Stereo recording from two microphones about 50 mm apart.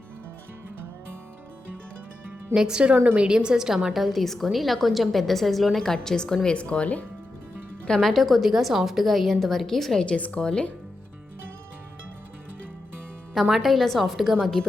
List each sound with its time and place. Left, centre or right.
2.6 s a woman's voice: centre
3.9 s a woman's voice: centre
6.5 s speech: left
7.9 s a woman's voice: centre
10.1 s speech: left
13.3 s a woman's voice: centre
14.6 s a woman's voice: centre